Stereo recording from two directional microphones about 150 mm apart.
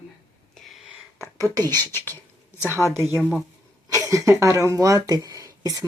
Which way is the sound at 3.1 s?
5° left (ahead or behind).